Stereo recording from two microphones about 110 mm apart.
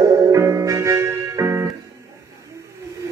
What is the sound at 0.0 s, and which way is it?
Music, 25° right (ahead or behind).